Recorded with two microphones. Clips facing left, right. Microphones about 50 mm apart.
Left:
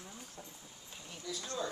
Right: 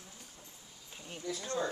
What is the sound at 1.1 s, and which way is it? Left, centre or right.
Speech, right.